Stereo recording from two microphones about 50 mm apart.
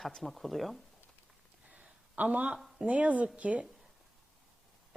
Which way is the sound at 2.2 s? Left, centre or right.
Right.